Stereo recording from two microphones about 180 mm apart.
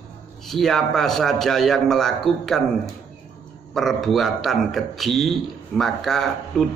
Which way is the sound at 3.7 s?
Centre (ahead or behind).